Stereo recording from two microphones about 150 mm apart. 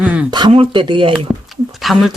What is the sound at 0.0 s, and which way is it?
Speech, 5° right (ahead or behind).